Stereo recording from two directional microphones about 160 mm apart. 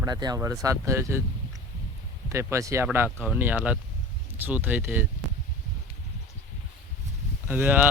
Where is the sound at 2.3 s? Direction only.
20° right (ahead or behind).